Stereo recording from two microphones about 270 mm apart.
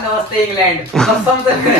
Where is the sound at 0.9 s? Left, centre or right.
Centre.